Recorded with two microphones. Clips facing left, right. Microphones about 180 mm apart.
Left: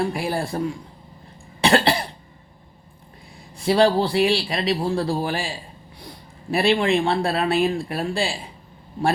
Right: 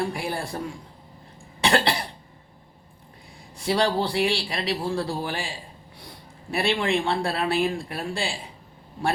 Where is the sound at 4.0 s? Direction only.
20° left (ahead or behind).